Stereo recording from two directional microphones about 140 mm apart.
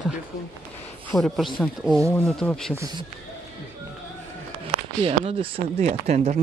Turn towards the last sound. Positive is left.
turn(degrees=-50)  # may be behind; listen again after turning